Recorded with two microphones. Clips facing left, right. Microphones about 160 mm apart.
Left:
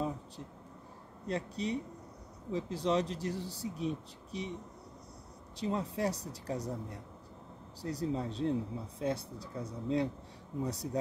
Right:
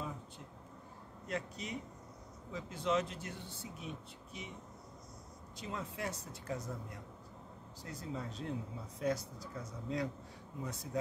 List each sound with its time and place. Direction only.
1.2 s speech: 35° left (ahead or behind)
5.6 s speech: 35° left (ahead or behind)